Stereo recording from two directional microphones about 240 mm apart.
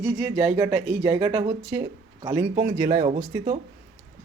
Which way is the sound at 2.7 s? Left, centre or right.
Centre.